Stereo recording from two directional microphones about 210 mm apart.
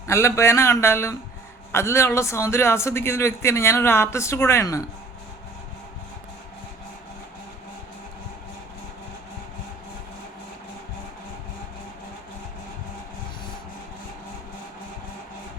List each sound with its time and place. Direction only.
0.1 s a man's voice: 15° left (ahead or behind)